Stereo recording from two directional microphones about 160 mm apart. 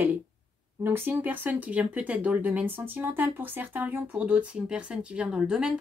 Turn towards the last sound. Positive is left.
turn(degrees=-5)  # may be behind; listen again after turning